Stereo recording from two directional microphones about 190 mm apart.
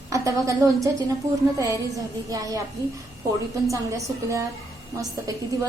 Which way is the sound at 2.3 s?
20° right (ahead or behind).